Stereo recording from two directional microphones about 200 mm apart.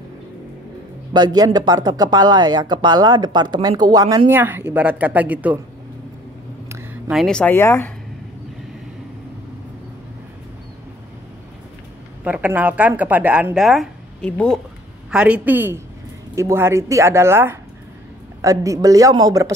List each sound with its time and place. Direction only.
1.1 s speech: 20° right (ahead or behind)
6.7 s speech: 5° right (ahead or behind); by 7.9 s 10° left (ahead or behind)
12.3 s a woman's voice: 10° right (ahead or behind)
15.0 s a woman's voice: 5° right (ahead or behind)